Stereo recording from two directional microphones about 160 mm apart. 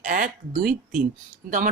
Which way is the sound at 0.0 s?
55° right (ahead or behind).